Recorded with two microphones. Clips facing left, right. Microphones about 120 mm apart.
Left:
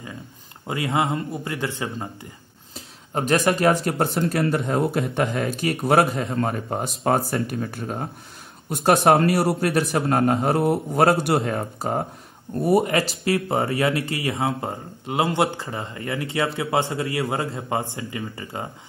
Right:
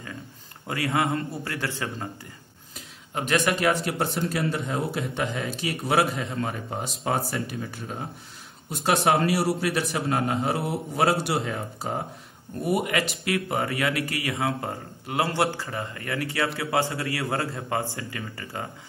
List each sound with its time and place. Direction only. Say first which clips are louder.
0.7 s speech: left 2 dB; 20° left (ahead or behind)
2.7 s a man's voice: left 5 dB; 40° left (ahead or behind)
12.6 s speech: left 6 dB; 35° left (ahead or behind)